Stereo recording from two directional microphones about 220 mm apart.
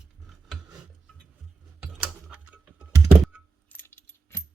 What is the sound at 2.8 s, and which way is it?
Computer keyboard, 5° right (ahead or behind).